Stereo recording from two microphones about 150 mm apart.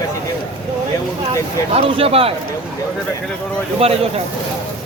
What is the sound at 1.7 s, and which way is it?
Speech, 40° right (ahead or behind).